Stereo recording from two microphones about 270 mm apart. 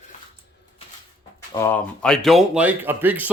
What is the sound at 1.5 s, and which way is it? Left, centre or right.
Speech, centre.